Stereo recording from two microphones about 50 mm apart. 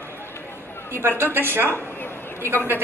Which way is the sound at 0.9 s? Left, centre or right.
Right.